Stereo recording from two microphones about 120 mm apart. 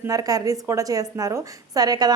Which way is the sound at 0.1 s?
30° right (ahead or behind).